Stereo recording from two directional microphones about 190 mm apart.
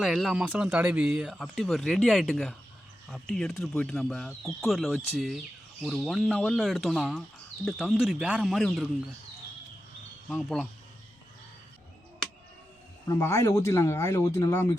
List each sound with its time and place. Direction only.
0.0 s speech: centre (ahead or behind)
10.2 s speech: centre (ahead or behind)
13.1 s speech: 15° left (ahead or behind)